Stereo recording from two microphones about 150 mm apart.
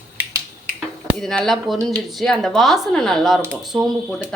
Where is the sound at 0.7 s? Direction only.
5° left (ahead or behind).